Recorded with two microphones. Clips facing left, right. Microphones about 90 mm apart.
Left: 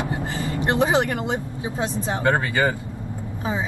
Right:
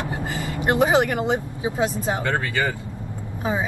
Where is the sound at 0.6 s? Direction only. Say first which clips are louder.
Right 2 dB; 15° right (ahead or behind).